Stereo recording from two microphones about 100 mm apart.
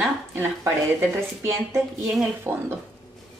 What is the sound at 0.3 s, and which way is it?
A woman's voice, 25° right (ahead or behind).